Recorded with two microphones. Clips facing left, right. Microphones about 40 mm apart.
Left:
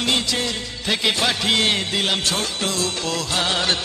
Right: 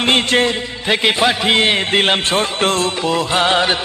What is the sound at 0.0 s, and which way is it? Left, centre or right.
Music, right.